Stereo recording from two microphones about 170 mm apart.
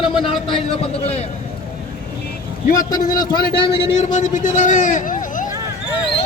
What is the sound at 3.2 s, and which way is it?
Speech, 25° left (ahead or behind).